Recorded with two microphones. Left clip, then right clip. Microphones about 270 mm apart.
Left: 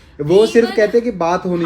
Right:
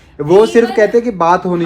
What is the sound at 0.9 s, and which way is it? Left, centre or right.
Speech, right.